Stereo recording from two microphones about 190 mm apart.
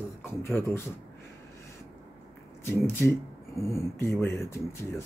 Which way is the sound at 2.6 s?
15° left (ahead or behind).